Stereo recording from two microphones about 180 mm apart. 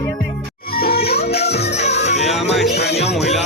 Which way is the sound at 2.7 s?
65° left (ahead or behind).